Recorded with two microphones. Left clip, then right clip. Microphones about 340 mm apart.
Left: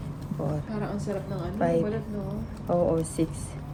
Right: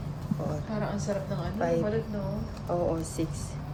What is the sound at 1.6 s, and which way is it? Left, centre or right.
Speech, left.